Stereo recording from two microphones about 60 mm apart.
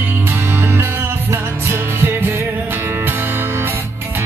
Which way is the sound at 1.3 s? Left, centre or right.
Right.